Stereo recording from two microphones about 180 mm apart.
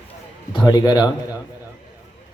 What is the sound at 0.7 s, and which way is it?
Speech, 20° left (ahead or behind).